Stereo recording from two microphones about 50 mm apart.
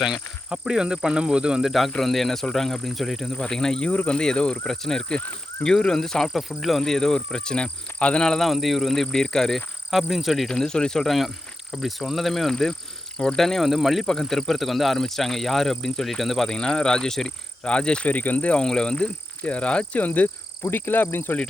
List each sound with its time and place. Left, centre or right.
0.6 s speech: centre
1.6 s speech: centre
3.5 s speech: centre
3.8 s speech: left
4.6 s speech: centre
8.4 s speech: centre
10.1 s speech: centre
10.5 s speech: centre
14.0 s speech: centre
16.6 s speech: centre
17.6 s speech: centre
18.1 s speech: left
18.6 s speech: centre; by 20.3 s left
20.7 s speech: left